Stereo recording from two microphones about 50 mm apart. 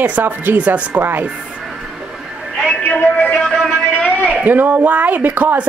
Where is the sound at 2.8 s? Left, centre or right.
Left.